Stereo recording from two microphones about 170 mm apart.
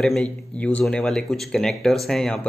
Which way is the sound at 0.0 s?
5° left (ahead or behind).